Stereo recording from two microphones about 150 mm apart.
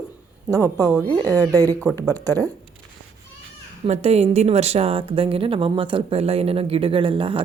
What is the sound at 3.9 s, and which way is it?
A woman's voice, 45° right (ahead or behind).